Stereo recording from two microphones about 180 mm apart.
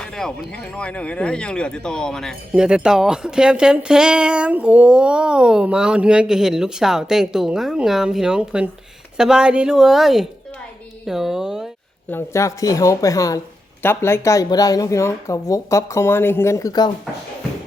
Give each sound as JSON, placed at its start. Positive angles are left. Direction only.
{"t": 0.0, "sound": "speech", "side_deg": 5}
{"t": 12.1, "sound": "speech", "side_deg": 15}